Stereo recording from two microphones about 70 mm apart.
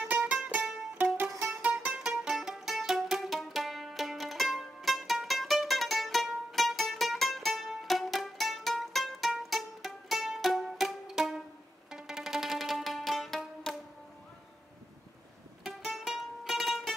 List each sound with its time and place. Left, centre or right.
0.0 s music: centre
2.0 s music: centre
15.6 s music: centre